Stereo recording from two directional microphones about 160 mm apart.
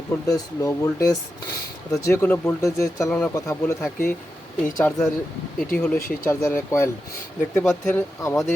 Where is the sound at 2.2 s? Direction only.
10° left (ahead or behind).